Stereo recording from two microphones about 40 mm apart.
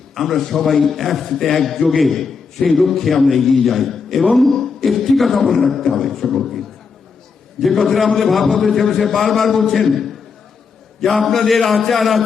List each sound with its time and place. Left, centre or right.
0.1 s a man's voice: centre